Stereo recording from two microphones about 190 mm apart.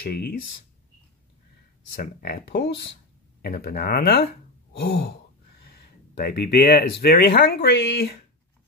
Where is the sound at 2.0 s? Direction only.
50° left (ahead or behind).